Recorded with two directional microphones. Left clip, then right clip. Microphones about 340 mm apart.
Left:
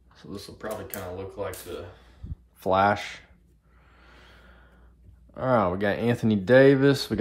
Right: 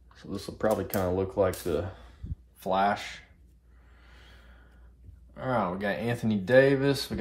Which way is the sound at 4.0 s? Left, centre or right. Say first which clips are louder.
Left 3 dB; centre.